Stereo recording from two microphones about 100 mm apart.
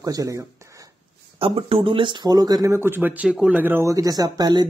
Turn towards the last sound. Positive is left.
turn(degrees=-40)  # may be behind; listen again after turning